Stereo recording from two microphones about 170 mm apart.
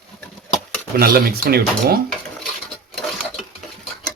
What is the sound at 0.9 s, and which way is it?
Speech, 60° right (ahead or behind).